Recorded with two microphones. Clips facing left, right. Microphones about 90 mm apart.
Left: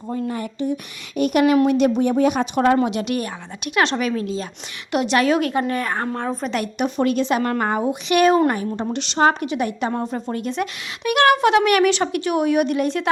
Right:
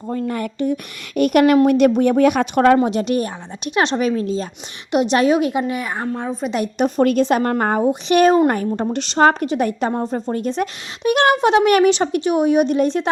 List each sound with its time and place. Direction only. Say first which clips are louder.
0.1 s a woman's voice: right 3 dB; 60° right (ahead or behind)
2.7 s speech: right 3 dB; 35° right (ahead or behind)
4.9 s a woman's voice: right 3 dB; 20° right (ahead or behind); by 6.5 s 5° right (ahead or behind)
6.7 s speech: right 5 dB; 40° right (ahead or behind)
8.4 s a woman's voice: right 3 dB; 45° right (ahead or behind)